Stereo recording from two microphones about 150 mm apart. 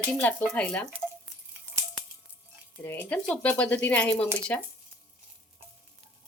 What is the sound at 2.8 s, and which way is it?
Speech, 10° left (ahead or behind).